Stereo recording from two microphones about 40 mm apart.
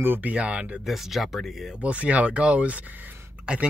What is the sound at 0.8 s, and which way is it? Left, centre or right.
Speech, centre.